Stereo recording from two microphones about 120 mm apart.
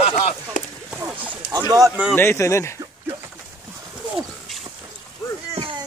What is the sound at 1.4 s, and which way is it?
Speech, 30° right (ahead or behind).